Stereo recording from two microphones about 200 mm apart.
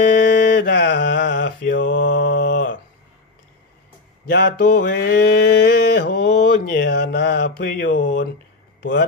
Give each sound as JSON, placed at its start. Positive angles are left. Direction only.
{"t": 0.2, "sound": "mantra", "side_deg": 60}
{"t": 4.3, "sound": "mantra", "side_deg": 50}
{"t": 7.9, "sound": "mantra", "side_deg": 65}